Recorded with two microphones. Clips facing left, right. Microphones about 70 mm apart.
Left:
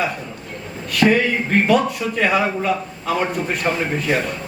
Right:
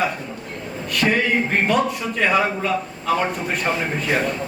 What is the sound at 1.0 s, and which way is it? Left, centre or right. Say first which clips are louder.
Speech: left 5 dB; left.